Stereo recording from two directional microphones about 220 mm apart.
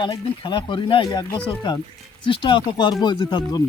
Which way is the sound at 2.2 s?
20° left (ahead or behind).